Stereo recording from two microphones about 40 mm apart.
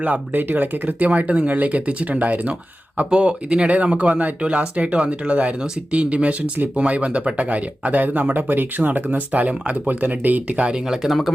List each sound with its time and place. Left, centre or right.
0.0 s speech: right
0.9 s speech: right
3.1 s speech: right
10.8 s speech: centre